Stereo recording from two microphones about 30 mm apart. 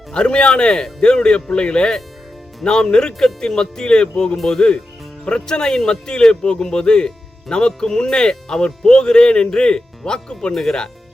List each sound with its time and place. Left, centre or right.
0.1 s speech: left
10.5 s speech: centre